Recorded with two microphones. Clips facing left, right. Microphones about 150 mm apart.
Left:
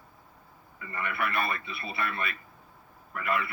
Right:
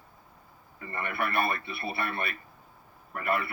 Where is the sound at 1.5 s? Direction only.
60° right (ahead or behind).